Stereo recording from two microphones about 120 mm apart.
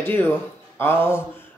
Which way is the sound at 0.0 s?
15° left (ahead or behind).